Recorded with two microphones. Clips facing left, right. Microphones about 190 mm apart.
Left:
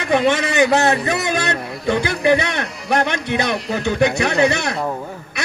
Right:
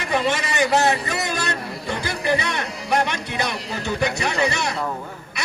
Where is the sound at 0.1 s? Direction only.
60° left (ahead or behind).